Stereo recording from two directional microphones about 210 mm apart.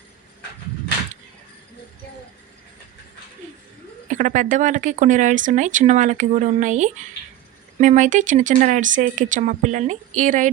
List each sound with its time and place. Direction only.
4.1 s speech: 35° right (ahead or behind)